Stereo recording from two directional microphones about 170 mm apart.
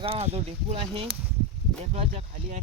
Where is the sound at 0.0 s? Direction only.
35° right (ahead or behind).